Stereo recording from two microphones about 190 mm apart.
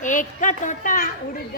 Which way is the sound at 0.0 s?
40° left (ahead or behind).